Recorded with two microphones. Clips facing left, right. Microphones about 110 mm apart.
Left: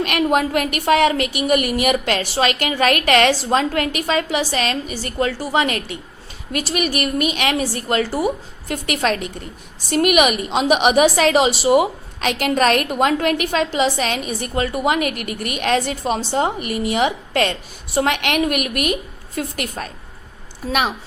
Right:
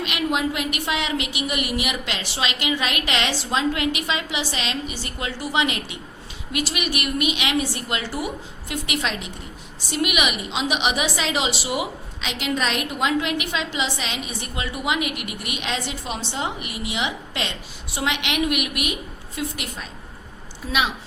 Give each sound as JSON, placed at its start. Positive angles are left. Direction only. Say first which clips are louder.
{"t": 0.0, "sound": "a woman's voice", "louder": "left 6 dB", "side_deg": 50}